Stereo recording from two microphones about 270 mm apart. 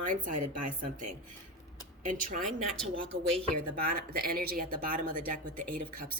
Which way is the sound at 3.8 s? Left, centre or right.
Right.